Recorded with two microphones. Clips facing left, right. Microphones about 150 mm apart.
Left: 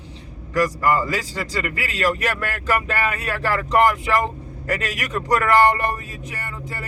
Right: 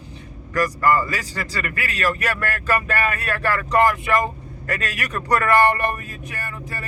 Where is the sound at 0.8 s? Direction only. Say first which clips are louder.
Right 1 dB; 20° left (ahead or behind).